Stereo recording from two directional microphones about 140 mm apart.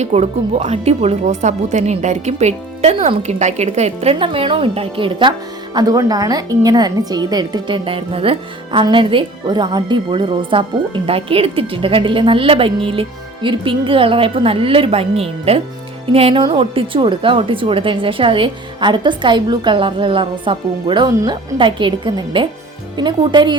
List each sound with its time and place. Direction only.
0.0 s speech: 50° right (ahead or behind)
5.7 s speech: 25° right (ahead or behind)